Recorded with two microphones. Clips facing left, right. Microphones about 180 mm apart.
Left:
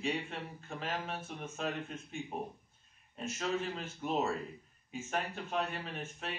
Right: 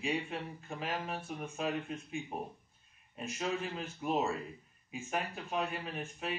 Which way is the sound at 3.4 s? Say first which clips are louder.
Even; 5° right (ahead or behind).